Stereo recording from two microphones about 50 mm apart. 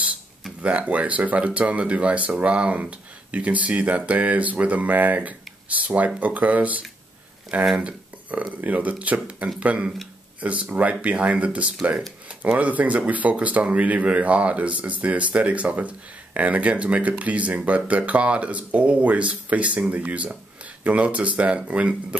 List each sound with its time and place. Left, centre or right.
0.6 s speech: right